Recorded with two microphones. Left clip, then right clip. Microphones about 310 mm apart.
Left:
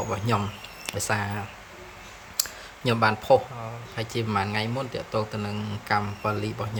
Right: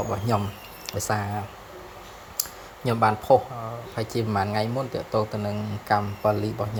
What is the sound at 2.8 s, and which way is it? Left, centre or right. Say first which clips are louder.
A man's voice: right 1 dB; centre.